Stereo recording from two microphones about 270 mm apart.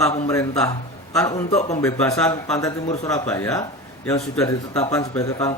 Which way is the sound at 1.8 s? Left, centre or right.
Centre.